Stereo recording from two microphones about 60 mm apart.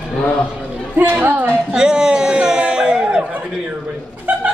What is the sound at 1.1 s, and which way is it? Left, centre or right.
Speech, right.